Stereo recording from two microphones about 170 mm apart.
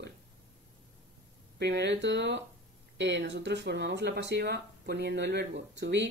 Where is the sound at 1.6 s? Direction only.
90° right.